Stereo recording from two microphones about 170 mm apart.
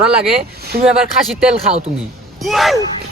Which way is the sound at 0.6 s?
65° right (ahead or behind).